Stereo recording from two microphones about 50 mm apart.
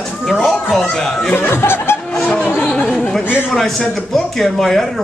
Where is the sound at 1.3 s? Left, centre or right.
Left.